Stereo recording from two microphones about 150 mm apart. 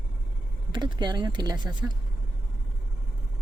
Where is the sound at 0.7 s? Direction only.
30° right (ahead or behind).